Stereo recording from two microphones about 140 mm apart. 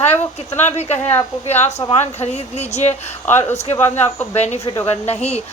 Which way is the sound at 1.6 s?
50° left (ahead or behind).